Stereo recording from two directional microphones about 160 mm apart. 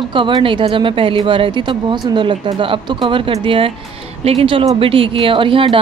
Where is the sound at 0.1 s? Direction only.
30° right (ahead or behind).